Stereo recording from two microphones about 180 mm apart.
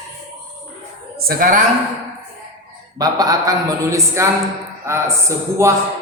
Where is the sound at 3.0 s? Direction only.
20° right (ahead or behind).